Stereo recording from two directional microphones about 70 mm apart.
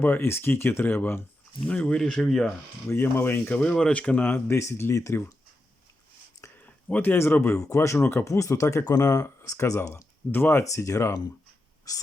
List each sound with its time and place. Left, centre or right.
0.0 s speech: left
1.6 s speech: centre
2.9 s speech: left
3.6 s speech: centre; by 5.2 s left
6.7 s speech: left
7.7 s speech: left
8.2 s speech: left
8.8 s speech: left
10.3 s speech: left
10.6 s speech: left
11.9 s a sound: left